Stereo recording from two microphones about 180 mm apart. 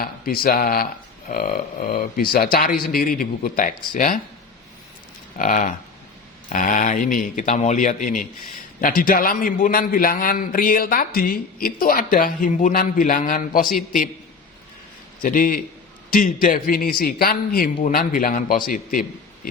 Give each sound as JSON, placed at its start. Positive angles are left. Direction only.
{"t": 0.0, "sound": "a man's voice", "side_deg": 55}
{"t": 5.4, "sound": "a man's voice", "side_deg": 45}
{"t": 15.2, "sound": "a man's voice", "side_deg": 50}